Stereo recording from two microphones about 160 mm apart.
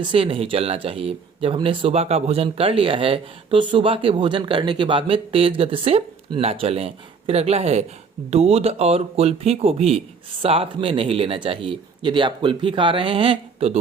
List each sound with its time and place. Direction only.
0.0 s speech: 35° right (ahead or behind)